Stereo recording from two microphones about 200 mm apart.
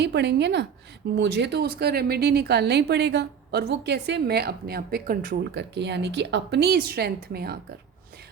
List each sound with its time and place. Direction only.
0.0 s a woman's voice: 55° right (ahead or behind)